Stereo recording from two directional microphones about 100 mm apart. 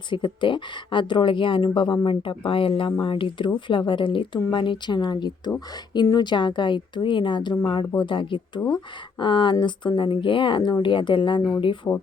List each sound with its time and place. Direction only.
0.1 s speech: 55° left (ahead or behind)
11.9 s speech: 35° left (ahead or behind)